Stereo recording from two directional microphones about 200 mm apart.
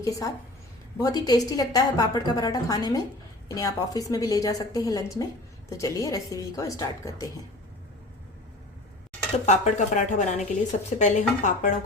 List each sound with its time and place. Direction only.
0.0 s a woman's voice: 15° left (ahead or behind)
9.5 s speech: 35° left (ahead or behind)